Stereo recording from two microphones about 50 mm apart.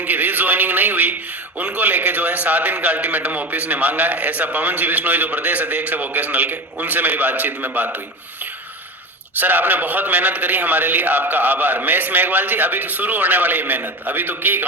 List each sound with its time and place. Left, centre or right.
0.0 s a man's voice: right
9.4 s a man's voice: right